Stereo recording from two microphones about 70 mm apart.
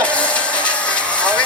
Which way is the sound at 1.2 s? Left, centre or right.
Centre.